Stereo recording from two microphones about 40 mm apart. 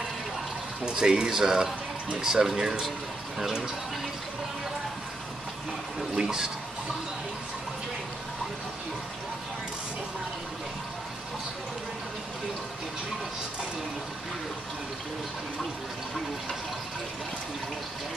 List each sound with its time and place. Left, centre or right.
0.8 s speech: centre
6.1 s speech: centre